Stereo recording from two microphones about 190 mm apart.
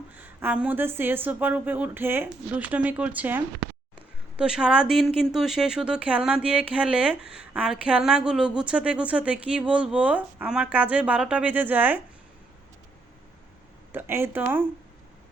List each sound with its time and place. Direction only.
0.2 s a woman's voice: 10° right (ahead or behind)
13.9 s a woman's voice: 10° right (ahead or behind)